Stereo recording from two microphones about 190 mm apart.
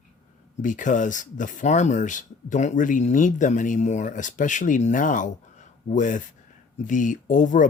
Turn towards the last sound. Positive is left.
turn(degrees=40)  # may be behind; listen again after turning